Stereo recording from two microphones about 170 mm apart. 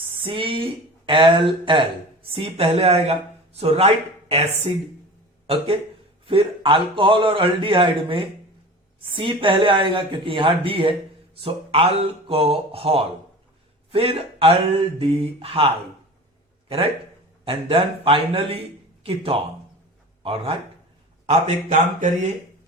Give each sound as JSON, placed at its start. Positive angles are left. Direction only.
{"t": 0.2, "sound": "a man's voice", "side_deg": -30}
{"t": 6.2, "sound": "a man's voice", "side_deg": -30}
{"t": 17.4, "sound": "a man's voice", "side_deg": -35}
{"t": 21.2, "sound": "speech", "side_deg": -45}